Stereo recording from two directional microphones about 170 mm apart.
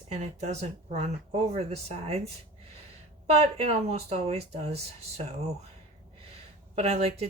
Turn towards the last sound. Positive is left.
turn(degrees=-40)  # may be behind; listen again after turning